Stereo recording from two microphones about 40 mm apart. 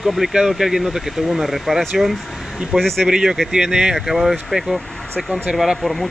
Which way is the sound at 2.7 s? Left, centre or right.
Centre.